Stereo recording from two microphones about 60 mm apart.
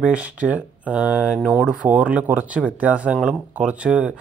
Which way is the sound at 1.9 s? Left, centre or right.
Right.